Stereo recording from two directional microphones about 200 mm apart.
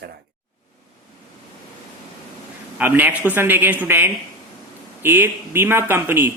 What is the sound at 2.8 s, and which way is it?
Speech, 10° right (ahead or behind).